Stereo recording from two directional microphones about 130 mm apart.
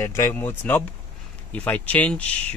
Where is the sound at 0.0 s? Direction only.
20° left (ahead or behind).